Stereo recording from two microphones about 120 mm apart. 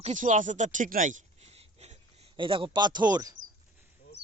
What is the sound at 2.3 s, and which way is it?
Speech, 45° right (ahead or behind).